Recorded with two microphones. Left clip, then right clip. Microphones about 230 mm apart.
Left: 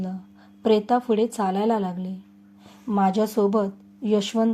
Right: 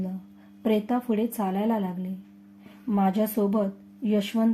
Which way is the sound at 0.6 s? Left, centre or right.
Left.